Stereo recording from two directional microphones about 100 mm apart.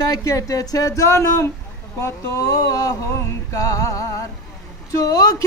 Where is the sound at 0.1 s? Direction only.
35° left (ahead or behind).